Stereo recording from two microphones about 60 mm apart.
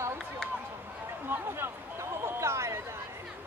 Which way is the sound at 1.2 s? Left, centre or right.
Right.